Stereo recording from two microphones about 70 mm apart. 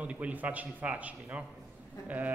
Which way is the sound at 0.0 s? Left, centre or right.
Centre.